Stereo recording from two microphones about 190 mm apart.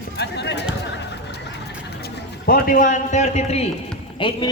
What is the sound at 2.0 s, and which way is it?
A man's voice, 50° left (ahead or behind).